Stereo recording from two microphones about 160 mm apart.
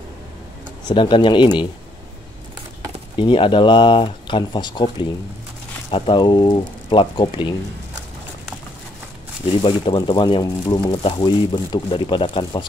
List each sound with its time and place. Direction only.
0.8 s speech: 30° left (ahead or behind)
3.2 s speech: 30° left (ahead or behind)
9.6 s speech: 30° left (ahead or behind)